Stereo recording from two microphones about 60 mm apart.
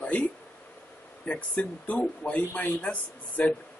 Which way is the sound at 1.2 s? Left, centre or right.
Left.